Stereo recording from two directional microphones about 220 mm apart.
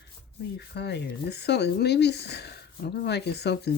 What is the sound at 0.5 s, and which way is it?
Speech, 50° left (ahead or behind).